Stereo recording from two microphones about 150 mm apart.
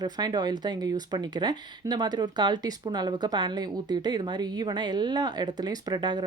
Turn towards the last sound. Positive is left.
turn(degrees=-30)  # may be behind; listen again after turning